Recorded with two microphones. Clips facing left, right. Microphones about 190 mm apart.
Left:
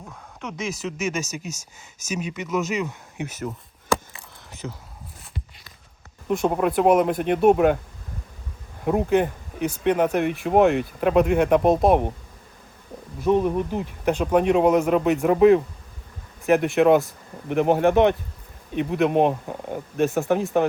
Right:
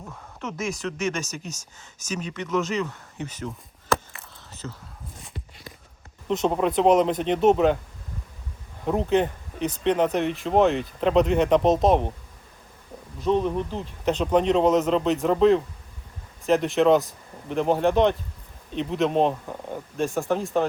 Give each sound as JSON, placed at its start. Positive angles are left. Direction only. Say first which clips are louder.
{"t": 0.5, "sound": "speech", "louder": "even", "side_deg": 0}
{"t": 3.9, "sound": "a sound", "louder": "left 1 dB", "side_deg": 15}
{"t": 6.2, "sound": "speech", "louder": "left 1 dB", "side_deg": 10}
{"t": 8.8, "sound": "speech", "louder": "left 2 dB", "side_deg": 10}
{"t": 13.2, "sound": "speech", "louder": "left 3 dB", "side_deg": 15}
{"t": 16.7, "sound": "speech", "louder": "left 1 dB", "side_deg": 15}